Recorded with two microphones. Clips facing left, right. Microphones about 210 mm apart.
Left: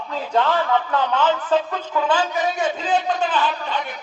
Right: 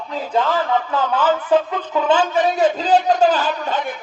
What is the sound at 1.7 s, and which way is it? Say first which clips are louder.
Speech: right 3 dB; 25° right (ahead or behind).